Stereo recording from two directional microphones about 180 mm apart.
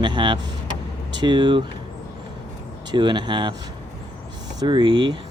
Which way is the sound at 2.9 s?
25° right (ahead or behind).